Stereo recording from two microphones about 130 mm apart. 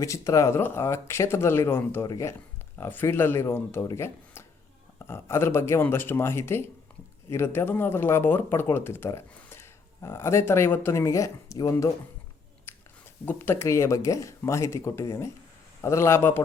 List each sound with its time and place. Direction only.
0.0 s speech: 25° left (ahead or behind)
2.7 s speech: 15° left (ahead or behind)
12.7 s chewing: 20° left (ahead or behind)
13.2 s speech: 15° left (ahead or behind)